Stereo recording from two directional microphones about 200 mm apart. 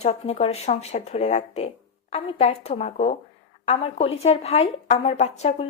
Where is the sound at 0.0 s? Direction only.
35° left (ahead or behind).